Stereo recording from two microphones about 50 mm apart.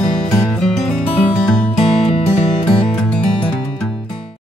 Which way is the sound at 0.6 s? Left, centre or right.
Centre.